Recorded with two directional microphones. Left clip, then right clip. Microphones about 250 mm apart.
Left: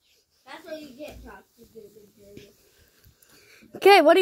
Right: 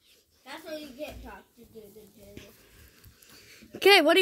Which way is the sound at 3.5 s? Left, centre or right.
Centre.